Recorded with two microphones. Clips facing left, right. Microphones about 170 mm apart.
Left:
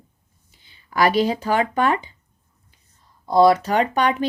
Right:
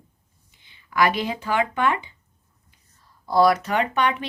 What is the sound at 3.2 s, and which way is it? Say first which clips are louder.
Speech: left 3 dB; 20° left (ahead or behind).